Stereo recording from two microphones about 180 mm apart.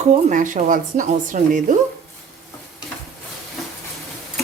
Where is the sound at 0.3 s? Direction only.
45° right (ahead or behind).